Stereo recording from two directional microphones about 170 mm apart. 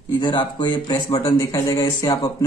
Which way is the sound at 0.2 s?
30° left (ahead or behind).